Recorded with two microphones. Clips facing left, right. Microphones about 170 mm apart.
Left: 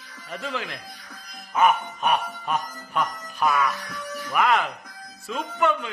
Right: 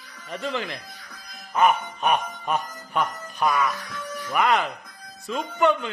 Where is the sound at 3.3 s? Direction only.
Centre (ahead or behind).